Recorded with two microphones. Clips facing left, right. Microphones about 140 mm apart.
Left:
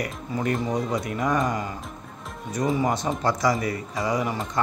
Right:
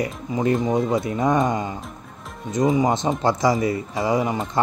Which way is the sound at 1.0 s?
25° right (ahead or behind).